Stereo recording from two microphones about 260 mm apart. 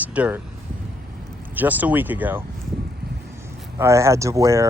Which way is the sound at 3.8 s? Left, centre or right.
Centre.